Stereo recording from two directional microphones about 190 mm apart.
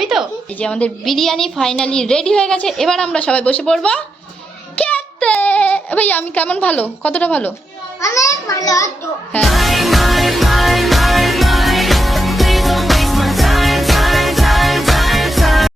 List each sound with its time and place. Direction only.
0.0 s a woman's voice: centre (ahead or behind)
4.8 s child singing: 5° left (ahead or behind)
8.0 s a child's voice: 15° left (ahead or behind)
9.3 s music: centre (ahead or behind)